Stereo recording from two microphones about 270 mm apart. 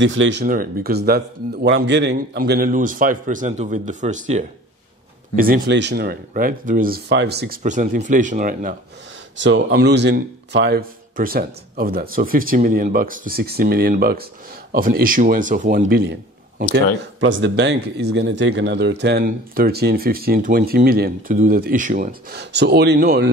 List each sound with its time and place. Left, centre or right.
0.0 s a man's voice: right
9.4 s a man's voice: right